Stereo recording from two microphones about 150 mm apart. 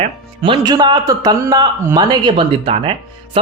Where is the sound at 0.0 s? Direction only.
35° right (ahead or behind).